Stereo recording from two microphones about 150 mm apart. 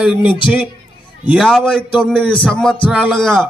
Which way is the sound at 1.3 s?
Centre (ahead or behind).